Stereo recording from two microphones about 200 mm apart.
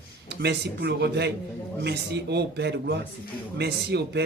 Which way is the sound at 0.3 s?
55° right (ahead or behind).